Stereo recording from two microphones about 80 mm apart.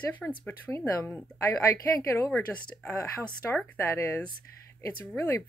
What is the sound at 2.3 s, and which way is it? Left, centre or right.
Speech, left.